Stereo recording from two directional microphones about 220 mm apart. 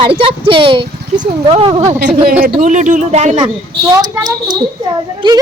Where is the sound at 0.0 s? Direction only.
25° right (ahead or behind).